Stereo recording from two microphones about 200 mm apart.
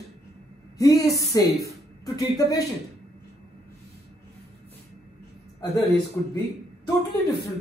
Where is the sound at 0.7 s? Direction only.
15° left (ahead or behind).